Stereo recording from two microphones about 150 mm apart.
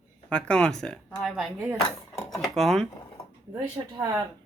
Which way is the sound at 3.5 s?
25° right (ahead or behind).